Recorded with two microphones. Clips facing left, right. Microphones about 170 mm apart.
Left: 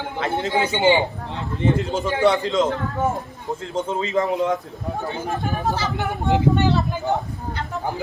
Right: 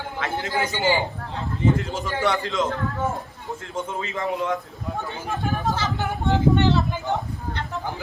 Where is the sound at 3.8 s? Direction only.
35° left (ahead or behind).